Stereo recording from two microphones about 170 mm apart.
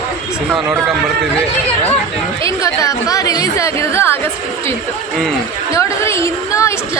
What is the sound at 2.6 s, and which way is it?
A woman's voice, 20° left (ahead or behind).